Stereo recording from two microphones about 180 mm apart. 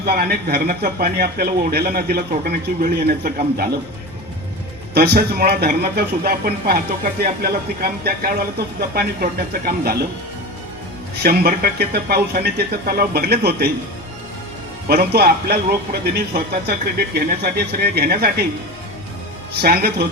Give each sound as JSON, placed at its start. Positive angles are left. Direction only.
{"t": 0.0, "sound": "a man's voice", "side_deg": -60}
{"t": 4.9, "sound": "a man's voice", "side_deg": -60}
{"t": 11.2, "sound": "a man's voice", "side_deg": -60}
{"t": 14.8, "sound": "a man's voice", "side_deg": -60}
{"t": 19.5, "sound": "a man's voice", "side_deg": -60}